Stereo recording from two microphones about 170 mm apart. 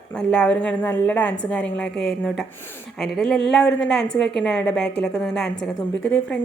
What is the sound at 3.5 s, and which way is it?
Speech, 5° left (ahead or behind).